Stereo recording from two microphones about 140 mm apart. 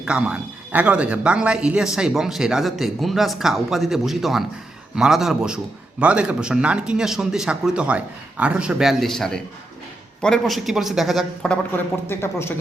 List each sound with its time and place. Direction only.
0.0 s speech: 10° right (ahead or behind)
12.0 s speech: 15° left (ahead or behind)